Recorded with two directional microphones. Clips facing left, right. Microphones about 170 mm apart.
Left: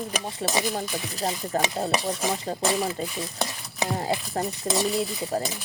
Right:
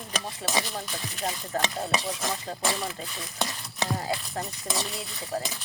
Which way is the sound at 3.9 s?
30° left (ahead or behind).